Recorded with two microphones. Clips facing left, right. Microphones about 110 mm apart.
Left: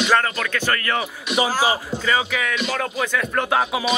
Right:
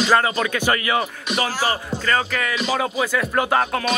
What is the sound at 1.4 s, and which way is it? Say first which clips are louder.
Music: left 3 dB; 15° left (ahead or behind).